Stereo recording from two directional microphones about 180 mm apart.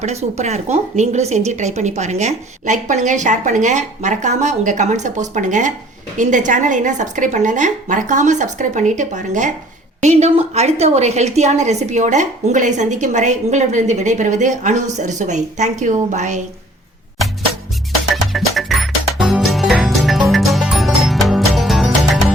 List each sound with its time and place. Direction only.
0.0 s a woman's voice: 40° right (ahead or behind)
18.1 s music: centre (ahead or behind)